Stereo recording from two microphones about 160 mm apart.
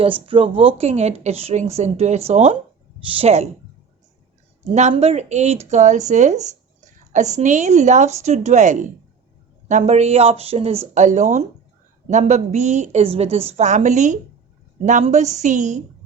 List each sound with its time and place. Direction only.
0.3 s speech: 35° right (ahead or behind)
4.7 s speech: 45° right (ahead or behind)
10.9 s speech: 50° right (ahead or behind)